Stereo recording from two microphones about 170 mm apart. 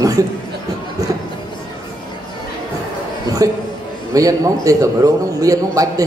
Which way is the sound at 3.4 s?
20° right (ahead or behind).